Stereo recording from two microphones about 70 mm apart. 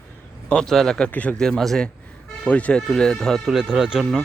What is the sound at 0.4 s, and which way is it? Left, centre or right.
Speech, centre.